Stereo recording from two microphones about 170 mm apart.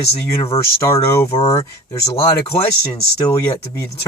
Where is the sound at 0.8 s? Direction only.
20° left (ahead or behind).